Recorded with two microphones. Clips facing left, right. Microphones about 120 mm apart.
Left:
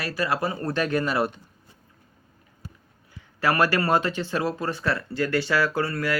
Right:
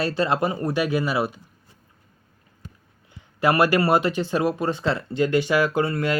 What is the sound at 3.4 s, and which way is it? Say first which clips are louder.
Speech: right 3 dB; 15° right (ahead or behind).